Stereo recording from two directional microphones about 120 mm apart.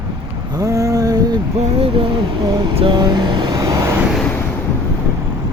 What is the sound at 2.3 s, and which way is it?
Speech, 40° right (ahead or behind).